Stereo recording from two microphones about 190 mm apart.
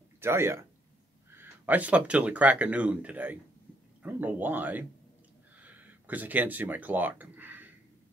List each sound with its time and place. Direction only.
0.2 s speech: 15° right (ahead or behind)